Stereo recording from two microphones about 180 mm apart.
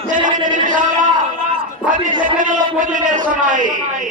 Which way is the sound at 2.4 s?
45° right (ahead or behind).